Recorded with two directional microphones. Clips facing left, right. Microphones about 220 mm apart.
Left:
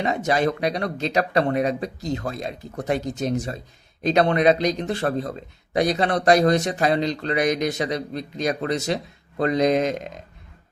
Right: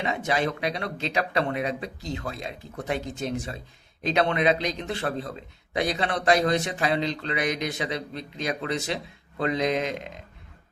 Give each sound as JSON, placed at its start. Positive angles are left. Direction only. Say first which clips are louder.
{"t": 0.0, "sound": "speech", "louder": "left 5 dB", "side_deg": 40}